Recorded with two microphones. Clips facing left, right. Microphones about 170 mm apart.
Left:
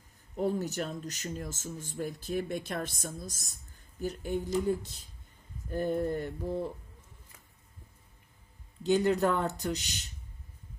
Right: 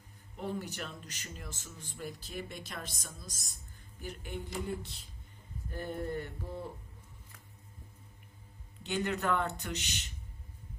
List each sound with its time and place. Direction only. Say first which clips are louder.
0.3 s speech: left 8 dB; 40° left (ahead or behind)
8.8 s speech: left 8 dB; 35° left (ahead or behind)